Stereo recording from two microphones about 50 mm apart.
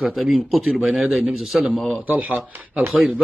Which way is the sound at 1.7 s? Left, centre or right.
Centre.